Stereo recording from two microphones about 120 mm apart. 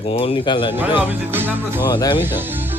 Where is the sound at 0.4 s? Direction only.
40° left (ahead or behind).